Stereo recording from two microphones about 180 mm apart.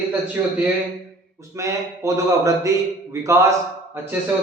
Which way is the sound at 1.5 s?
15° right (ahead or behind).